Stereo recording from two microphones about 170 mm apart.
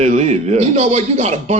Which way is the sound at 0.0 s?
40° right (ahead or behind).